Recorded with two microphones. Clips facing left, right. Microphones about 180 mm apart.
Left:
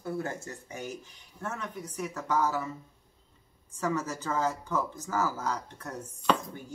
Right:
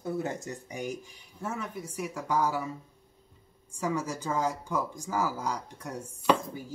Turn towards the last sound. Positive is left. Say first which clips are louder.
# right 2 dB
turn(degrees=-10)  # may be behind; listen again after turning